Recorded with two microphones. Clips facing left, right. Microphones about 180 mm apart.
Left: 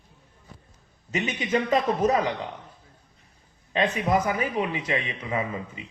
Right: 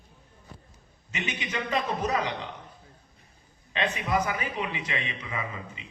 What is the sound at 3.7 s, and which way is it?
A man's voice, 45° left (ahead or behind).